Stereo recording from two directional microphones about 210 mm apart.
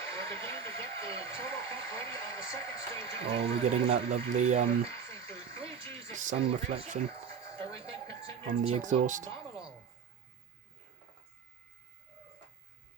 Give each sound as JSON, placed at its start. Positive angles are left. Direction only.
{"t": 0.1, "sound": "speech", "side_deg": 15}
{"t": 3.2, "sound": "speech", "side_deg": -30}
{"t": 4.9, "sound": "frog", "side_deg": 15}
{"t": 5.9, "sound": "speech", "side_deg": -35}
{"t": 8.2, "sound": "speech", "side_deg": -30}